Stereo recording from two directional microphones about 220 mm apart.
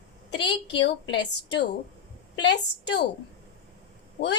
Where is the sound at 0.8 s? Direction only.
55° left (ahead or behind).